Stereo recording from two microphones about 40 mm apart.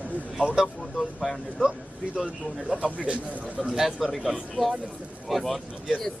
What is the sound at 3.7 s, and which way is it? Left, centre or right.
Speech, centre.